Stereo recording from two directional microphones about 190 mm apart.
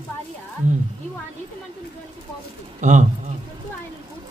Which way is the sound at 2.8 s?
40° right (ahead or behind).